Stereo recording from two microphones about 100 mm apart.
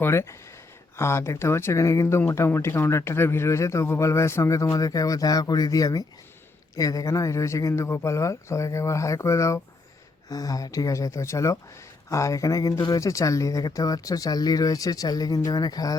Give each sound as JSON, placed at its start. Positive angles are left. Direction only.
{"t": 0.0, "sound": "speech", "side_deg": 25}